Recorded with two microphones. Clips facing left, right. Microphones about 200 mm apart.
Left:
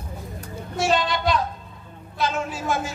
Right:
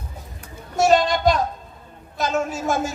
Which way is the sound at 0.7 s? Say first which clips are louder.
Right 5 dB; 45° right (ahead or behind).